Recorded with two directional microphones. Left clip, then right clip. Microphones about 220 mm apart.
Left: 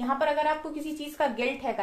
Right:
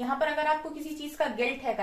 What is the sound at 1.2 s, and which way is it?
Speech, 45° left (ahead or behind).